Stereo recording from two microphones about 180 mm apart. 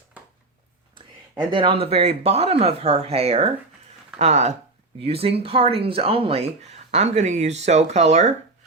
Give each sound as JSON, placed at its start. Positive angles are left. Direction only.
{"t": 0.9, "sound": "speech", "side_deg": -25}